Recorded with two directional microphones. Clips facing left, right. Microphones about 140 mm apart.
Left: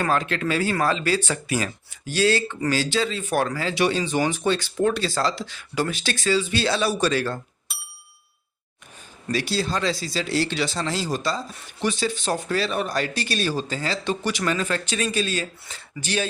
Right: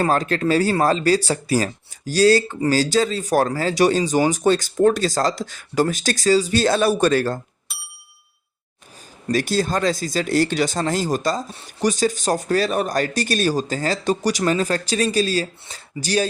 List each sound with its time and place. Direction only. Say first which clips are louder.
0.0 s speech: right 4 dB; 40° right (ahead or behind)
7.7 s ding: right 1 dB; centre (ahead or behind)
9.2 s speech: right 5 dB; 45° right (ahead or behind)